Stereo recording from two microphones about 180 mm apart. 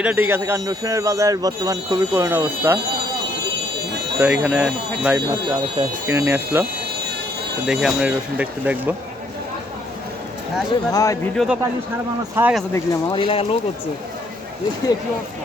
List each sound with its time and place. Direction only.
0.0 s speech: 10° right (ahead or behind)
4.2 s speech: 5° right (ahead or behind)
5.1 s speech: 15° right (ahead or behind)
7.7 s speech: 5° right (ahead or behind)
10.9 s speech: 20° left (ahead or behind)
11.3 s speech: 5° right (ahead or behind)
12.7 s speech: 20° left (ahead or behind)